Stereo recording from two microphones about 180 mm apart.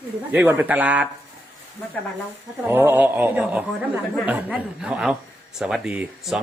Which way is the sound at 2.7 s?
10° right (ahead or behind).